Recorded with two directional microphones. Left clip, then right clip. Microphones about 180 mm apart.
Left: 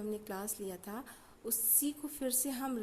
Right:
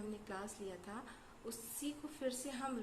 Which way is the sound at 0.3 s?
55° left (ahead or behind).